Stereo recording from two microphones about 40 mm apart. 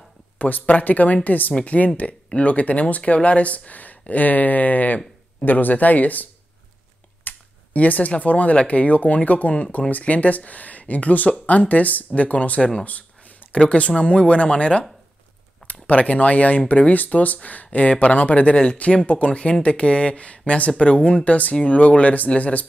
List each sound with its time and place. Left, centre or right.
0.4 s speech: left
7.3 s computer keyboard: left
7.7 s speech: left
12.8 s a sound: left
13.6 s speech: left
15.6 s speech: left